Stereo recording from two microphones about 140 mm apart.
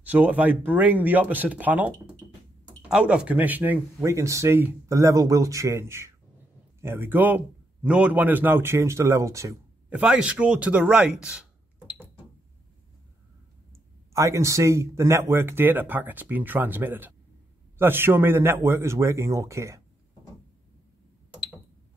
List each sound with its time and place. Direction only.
0.0 s a man's voice: 10° right (ahead or behind)
9.8 s speech: 10° right (ahead or behind)
14.1 s a man's voice: 20° right (ahead or behind)